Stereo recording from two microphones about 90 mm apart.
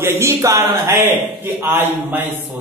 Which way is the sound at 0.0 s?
30° right (ahead or behind).